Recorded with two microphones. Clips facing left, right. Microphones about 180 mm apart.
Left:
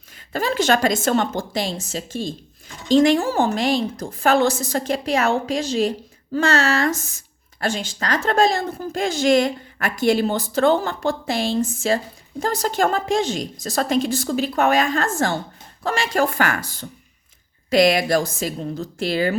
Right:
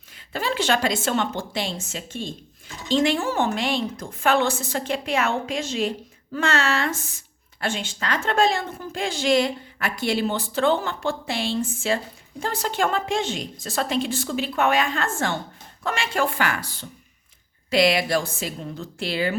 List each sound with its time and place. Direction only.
0.3 s a woman's voice: 45° left (ahead or behind)